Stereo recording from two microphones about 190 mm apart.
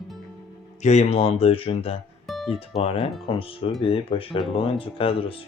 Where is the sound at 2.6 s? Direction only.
30° left (ahead or behind).